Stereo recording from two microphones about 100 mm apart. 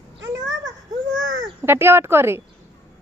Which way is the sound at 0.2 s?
35° right (ahead or behind).